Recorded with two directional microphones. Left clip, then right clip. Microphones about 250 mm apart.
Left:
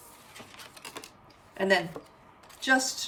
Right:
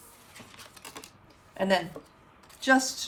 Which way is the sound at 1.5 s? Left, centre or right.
Centre.